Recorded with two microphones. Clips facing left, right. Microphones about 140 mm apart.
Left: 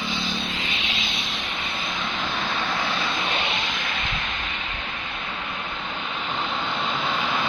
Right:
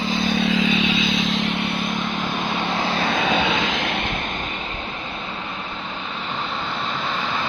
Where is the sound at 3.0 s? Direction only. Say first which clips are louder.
Right 7 dB; 80° right.